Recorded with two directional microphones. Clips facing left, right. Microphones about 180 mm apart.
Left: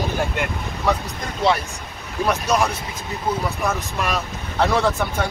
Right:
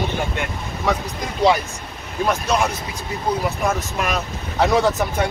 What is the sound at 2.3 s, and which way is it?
Speech, centre (ahead or behind).